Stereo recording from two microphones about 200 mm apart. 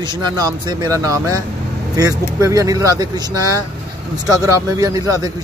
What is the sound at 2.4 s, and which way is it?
Speech, 15° right (ahead or behind).